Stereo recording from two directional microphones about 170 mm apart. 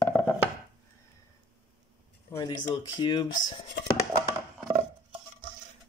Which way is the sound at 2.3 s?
25° left (ahead or behind).